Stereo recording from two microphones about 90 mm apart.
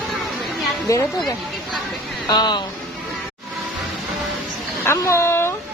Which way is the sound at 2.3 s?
55° left (ahead or behind).